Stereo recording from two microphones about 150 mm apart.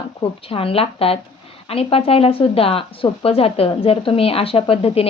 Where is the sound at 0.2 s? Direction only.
40° left (ahead or behind).